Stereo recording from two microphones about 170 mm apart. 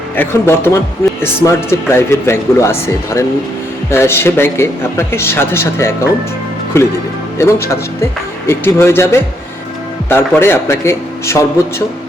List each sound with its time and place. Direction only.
0.2 s speech: 15° left (ahead or behind)